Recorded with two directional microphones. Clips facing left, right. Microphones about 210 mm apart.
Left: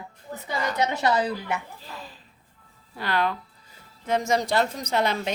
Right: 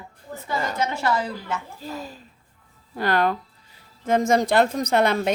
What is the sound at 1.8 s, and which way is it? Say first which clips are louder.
A woman's voice: right 8 dB; 45° right (ahead or behind).